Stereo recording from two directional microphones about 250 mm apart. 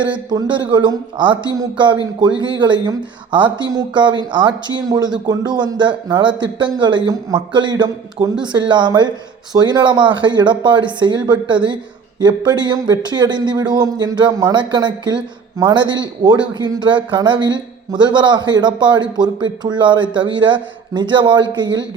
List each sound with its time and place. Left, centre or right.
0.0 s speech: centre